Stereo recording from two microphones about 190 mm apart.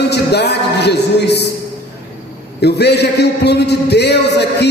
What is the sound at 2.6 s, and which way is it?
A man's voice, 60° left (ahead or behind).